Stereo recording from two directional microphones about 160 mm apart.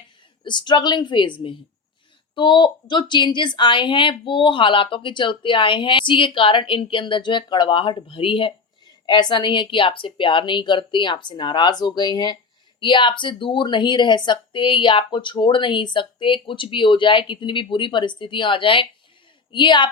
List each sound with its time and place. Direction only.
0.4 s a woman's voice: 30° left (ahead or behind)